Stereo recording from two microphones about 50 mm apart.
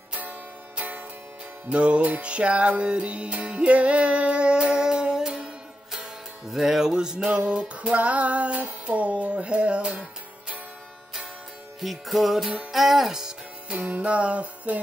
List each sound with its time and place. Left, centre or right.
0.1 s music: right
11.8 s music: centre
13.7 s music: right